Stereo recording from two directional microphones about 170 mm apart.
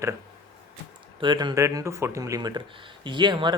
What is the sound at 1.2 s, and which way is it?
A man's voice, 25° right (ahead or behind).